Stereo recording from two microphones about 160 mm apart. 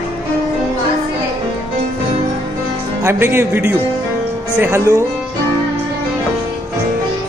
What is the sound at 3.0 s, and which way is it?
Speech, 15° right (ahead or behind).